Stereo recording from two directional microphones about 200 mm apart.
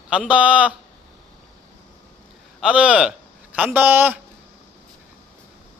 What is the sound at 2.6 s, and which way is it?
Speech, 5° right (ahead or behind).